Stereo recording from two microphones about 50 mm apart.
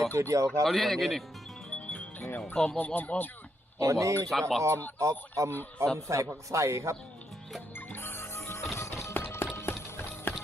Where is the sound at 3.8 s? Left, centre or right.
Right.